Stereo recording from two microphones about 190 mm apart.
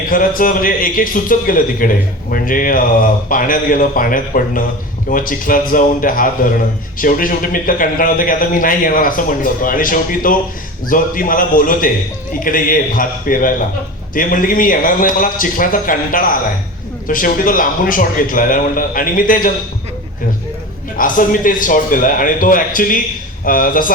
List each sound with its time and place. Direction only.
0.1 s speech: 45° left (ahead or behind)
21.0 s speech: 45° left (ahead or behind)